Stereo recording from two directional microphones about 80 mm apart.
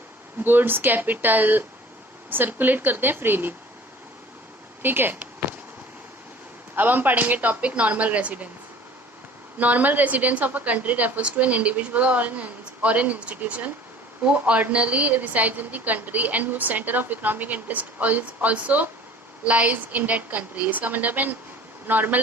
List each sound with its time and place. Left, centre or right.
0.4 s a woman's voice: right
4.8 s a sound: right
6.7 s a woman's voice: right
9.6 s a woman's voice: centre